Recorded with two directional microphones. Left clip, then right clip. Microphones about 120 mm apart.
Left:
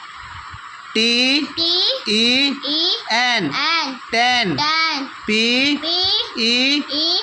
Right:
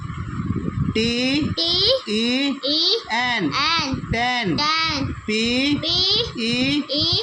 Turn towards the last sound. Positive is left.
turn(degrees=-20)  # may be behind; listen again after turning